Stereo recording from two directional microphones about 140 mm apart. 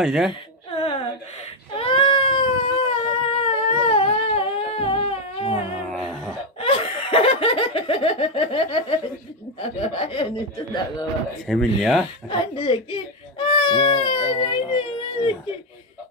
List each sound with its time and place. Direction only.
0.0 s speech: centre (ahead or behind)
0.7 s a sound: 45° left (ahead or behind)
1.8 s baby cry: 40° left (ahead or behind)
6.6 s laughter: 40° left (ahead or behind)
9.6 s speech: 45° left (ahead or behind)
11.4 s speech: centre (ahead or behind)
12.3 s speech: 35° left (ahead or behind)